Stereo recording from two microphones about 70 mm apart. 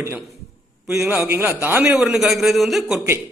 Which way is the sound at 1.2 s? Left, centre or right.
Right.